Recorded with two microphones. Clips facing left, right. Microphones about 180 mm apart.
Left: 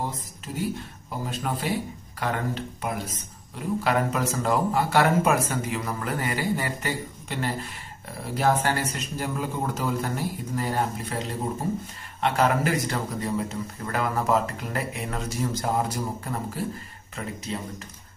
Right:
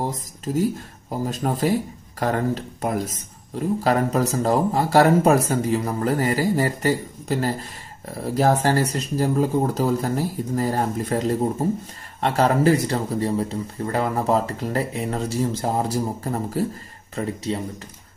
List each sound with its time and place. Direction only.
0.5 s speech: 40° right (ahead or behind)